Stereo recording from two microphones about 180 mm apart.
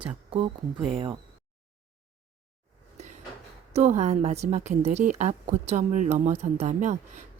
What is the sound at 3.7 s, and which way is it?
A woman's voice, 40° right (ahead or behind).